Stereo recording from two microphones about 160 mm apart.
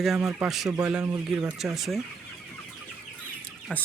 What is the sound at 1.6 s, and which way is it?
Speech, centre (ahead or behind).